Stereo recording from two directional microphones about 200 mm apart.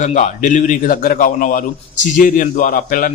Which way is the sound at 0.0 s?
40° left (ahead or behind).